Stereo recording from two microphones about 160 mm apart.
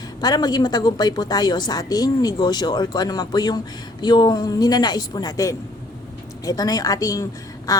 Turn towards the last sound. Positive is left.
turn(degrees=20)  # may be behind; listen again after turning